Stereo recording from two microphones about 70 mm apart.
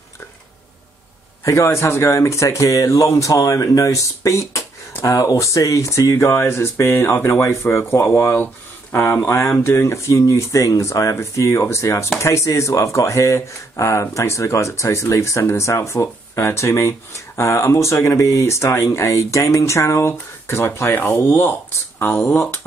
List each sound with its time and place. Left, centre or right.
1.4 s speech: left